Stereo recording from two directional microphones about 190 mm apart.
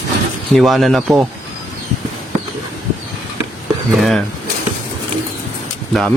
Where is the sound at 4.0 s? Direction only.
Centre (ahead or behind).